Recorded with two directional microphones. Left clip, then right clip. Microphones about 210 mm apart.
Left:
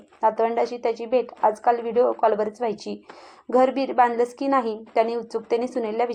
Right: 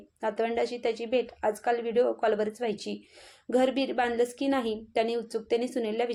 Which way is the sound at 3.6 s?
5° right (ahead or behind).